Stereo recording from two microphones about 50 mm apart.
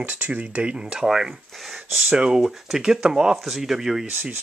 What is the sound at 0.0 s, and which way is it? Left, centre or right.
Speech, right.